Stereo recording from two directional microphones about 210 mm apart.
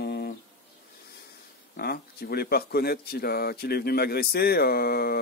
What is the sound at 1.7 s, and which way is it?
Speech, 45° left (ahead or behind).